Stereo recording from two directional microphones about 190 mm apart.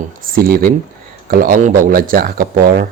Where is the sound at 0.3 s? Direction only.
50° right (ahead or behind).